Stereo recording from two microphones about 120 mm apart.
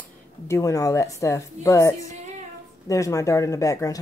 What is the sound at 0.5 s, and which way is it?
Speech, 25° left (ahead or behind).